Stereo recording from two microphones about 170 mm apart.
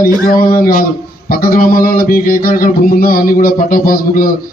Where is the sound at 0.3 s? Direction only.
60° left (ahead or behind).